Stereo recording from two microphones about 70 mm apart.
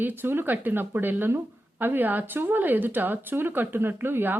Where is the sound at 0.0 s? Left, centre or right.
Right.